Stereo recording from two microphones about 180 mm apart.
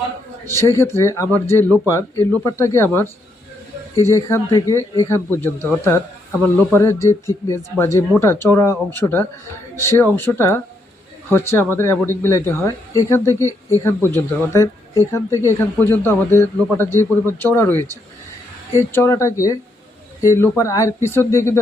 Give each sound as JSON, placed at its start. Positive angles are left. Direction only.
{"t": 0.4, "sound": "speech", "side_deg": 15}
{"t": 4.1, "sound": "speech", "side_deg": 15}